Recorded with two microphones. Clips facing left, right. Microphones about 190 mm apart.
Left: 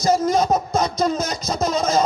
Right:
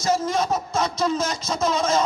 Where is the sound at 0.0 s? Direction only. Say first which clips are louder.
Left 4 dB; 35° left (ahead or behind).